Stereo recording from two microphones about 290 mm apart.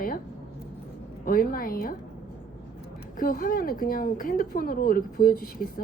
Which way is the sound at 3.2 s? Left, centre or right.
Left.